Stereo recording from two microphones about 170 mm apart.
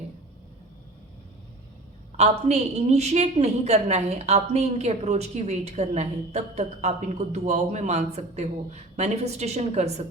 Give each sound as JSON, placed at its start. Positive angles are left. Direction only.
{"t": 2.1, "sound": "a woman's voice", "side_deg": -40}